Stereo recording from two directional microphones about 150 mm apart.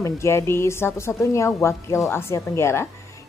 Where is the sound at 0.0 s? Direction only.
20° left (ahead or behind).